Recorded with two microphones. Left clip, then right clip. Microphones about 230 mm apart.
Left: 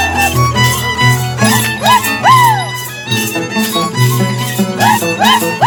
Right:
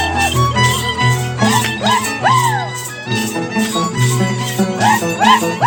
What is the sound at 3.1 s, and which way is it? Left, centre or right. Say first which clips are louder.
Music: left 4 dB; left.